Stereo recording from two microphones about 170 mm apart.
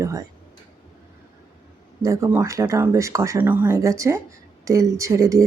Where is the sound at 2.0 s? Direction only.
20° right (ahead or behind).